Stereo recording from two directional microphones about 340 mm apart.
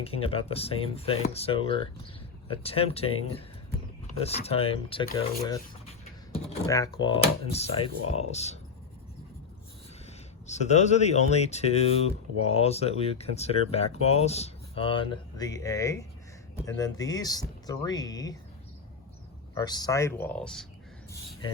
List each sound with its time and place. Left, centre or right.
0.0 s speech: centre
10.1 s speech: centre
19.5 s speech: centre